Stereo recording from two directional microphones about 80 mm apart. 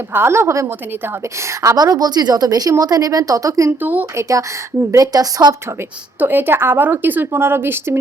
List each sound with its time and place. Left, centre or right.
0.1 s a woman's voice: right
1.7 s a woman's voice: right
3.7 s a woman's voice: right
4.2 s a woman's voice: right
6.1 s a woman's voice: right